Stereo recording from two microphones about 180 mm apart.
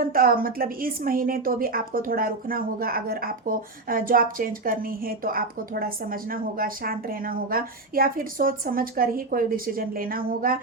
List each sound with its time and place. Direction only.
0.0 s a woman's voice: 55° right (ahead or behind)